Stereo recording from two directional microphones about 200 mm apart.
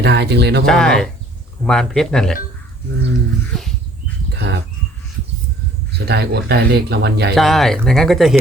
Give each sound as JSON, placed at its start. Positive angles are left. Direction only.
{"t": 0.0, "sound": "speech", "side_deg": -55}
{"t": 0.6, "sound": "speech", "side_deg": 5}
{"t": 3.5, "sound": "speech", "side_deg": 0}
{"t": 4.3, "sound": "livestock", "side_deg": -60}
{"t": 6.1, "sound": "speech", "side_deg": -55}
{"t": 7.3, "sound": "speech", "side_deg": 0}